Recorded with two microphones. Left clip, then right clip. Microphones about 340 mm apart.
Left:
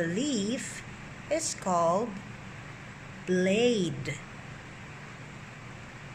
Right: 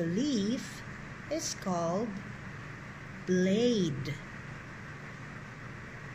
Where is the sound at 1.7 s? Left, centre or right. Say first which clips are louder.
Left 7 dB; left.